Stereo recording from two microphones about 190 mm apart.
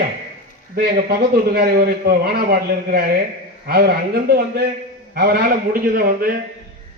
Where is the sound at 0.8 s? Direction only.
55° right (ahead or behind).